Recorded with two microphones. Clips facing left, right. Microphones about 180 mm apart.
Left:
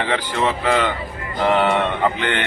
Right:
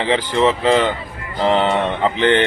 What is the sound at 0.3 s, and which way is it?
Speech, 25° right (ahead or behind).